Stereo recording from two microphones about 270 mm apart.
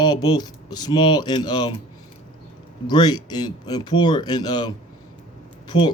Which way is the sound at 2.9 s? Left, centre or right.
Centre.